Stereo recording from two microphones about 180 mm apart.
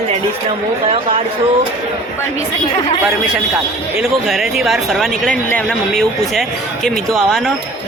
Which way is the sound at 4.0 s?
Centre (ahead or behind).